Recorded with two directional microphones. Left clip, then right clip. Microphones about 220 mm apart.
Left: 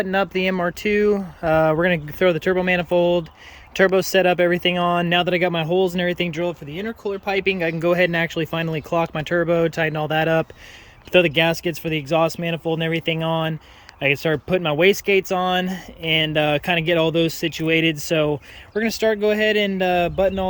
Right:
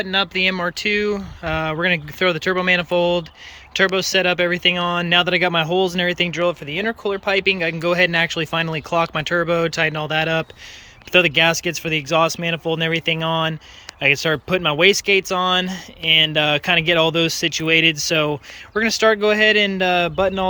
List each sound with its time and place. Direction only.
0.0 s speech: 20° left (ahead or behind)
6.7 s speech: 10° right (ahead or behind)
7.3 s speech: 10° left (ahead or behind)